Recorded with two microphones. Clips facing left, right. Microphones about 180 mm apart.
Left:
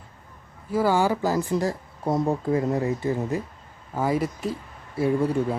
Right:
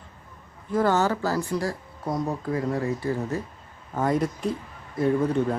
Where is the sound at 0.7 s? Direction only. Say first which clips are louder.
Left 1 dB; 10° left (ahead or behind).